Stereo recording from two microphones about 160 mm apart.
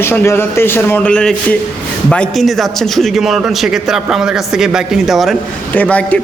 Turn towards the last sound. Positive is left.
turn(degrees=10)  # may be behind; listen again after turning